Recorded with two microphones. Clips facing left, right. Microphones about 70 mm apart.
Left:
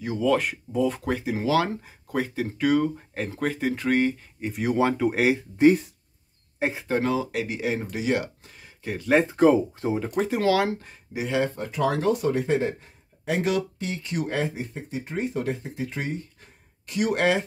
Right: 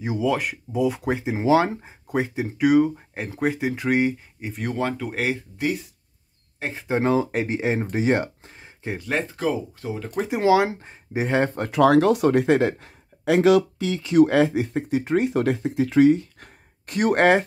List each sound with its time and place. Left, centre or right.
0.2 s speech: centre
1.1 s speech: right
4.5 s speech: centre
6.6 s speech: centre
7.0 s speech: right
9.3 s speech: left
10.3 s speech: right
16.8 s speech: right